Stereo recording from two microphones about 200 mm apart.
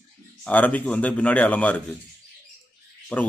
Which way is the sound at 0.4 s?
10° left (ahead or behind).